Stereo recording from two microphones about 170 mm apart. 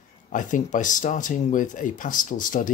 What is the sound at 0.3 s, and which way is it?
Speech, 50° left (ahead or behind).